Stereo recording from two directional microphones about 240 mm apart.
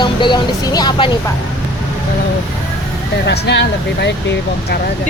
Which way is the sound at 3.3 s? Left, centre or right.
Left.